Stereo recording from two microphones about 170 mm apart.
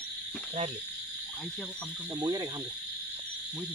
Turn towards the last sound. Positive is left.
turn(degrees=-25)  # may be behind; listen again after turning